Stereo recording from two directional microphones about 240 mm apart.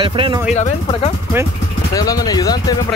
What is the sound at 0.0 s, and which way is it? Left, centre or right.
Speech, right.